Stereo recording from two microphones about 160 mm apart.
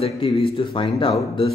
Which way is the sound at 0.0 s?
35° left (ahead or behind).